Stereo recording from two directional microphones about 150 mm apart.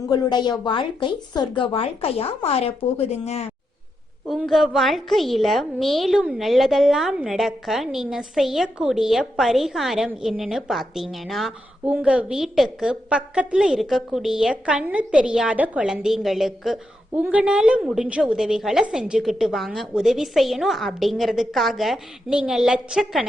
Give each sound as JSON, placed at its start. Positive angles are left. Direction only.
{"t": 0.1, "sound": "speech", "side_deg": 30}
{"t": 4.3, "sound": "a woman's voice", "side_deg": 0}